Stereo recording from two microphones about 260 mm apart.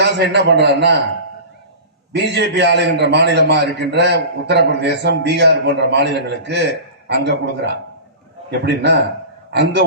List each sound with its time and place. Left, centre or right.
0.0 s a man's voice: right
2.1 s a man's voice: right